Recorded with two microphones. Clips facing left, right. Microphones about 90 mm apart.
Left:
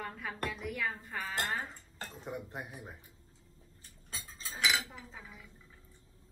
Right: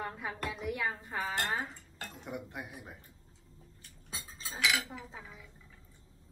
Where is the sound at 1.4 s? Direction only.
Centre (ahead or behind).